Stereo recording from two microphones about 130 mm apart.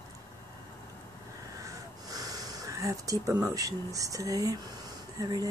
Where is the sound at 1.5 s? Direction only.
25° right (ahead or behind).